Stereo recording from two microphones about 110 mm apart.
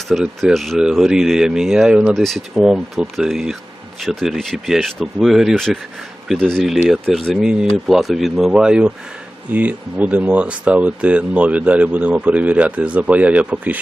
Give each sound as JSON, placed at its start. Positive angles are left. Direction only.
{"t": 0.1, "sound": "speech", "side_deg": 0}